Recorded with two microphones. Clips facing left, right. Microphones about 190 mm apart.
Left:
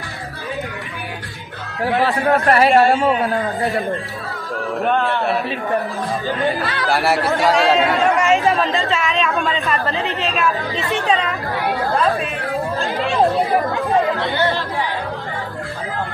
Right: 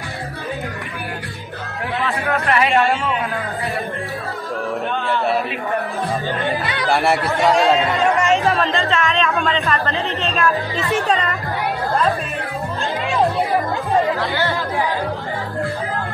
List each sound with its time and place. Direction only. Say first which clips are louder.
2.0 s a man's voice: left 5 dB; 35° left (ahead or behind)
6.9 s a man's voice: even; centre (ahead or behind)
14.2 s speech: left 2 dB; 20° left (ahead or behind)